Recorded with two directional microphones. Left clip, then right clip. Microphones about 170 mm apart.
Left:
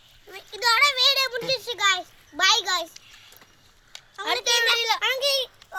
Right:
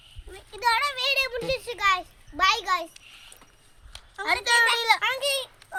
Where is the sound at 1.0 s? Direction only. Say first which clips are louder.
Left 3 dB; 15° left (ahead or behind).